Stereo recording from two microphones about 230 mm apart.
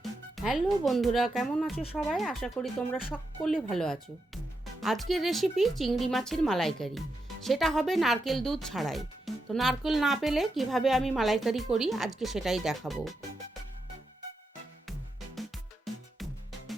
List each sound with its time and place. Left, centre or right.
0.3 s speech: centre
1.7 s speech: left
2.0 s speech: centre
15.4 s music: centre